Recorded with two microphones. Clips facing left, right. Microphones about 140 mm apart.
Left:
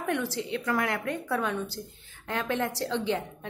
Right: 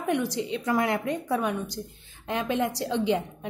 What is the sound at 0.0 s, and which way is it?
A woman's voice, 15° right (ahead or behind).